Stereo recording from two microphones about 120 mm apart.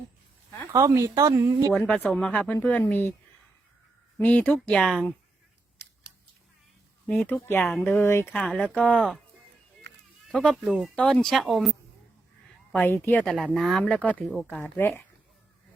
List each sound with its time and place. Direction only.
0.7 s speech: 25° right (ahead or behind)
1.7 s speech: 5° left (ahead or behind)
4.2 s speech: 15° left (ahead or behind)
7.6 s speech: 5° left (ahead or behind)
7.9 s speech: 20° left (ahead or behind)
8.3 s speech: 5° left (ahead or behind)
10.2 s speech: 5° left (ahead or behind)
12.7 s speech: 15° left (ahead or behind)
13.3 s speech: centre (ahead or behind); by 15.0 s 20° left (ahead or behind)